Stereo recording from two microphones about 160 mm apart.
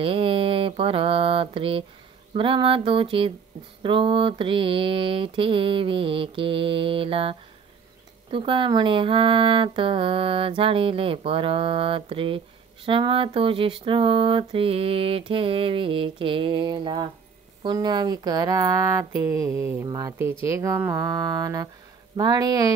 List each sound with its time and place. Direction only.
0.0 s mantra: 35° right (ahead or behind)
2.3 s a sound: 35° right (ahead or behind)
17.6 s speech: 25° right (ahead or behind)